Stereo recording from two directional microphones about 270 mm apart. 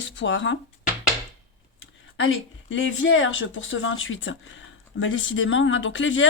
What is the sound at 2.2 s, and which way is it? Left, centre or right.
Speech, left.